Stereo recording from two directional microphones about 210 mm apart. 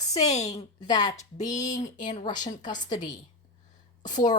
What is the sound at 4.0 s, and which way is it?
Speech, 35° left (ahead or behind).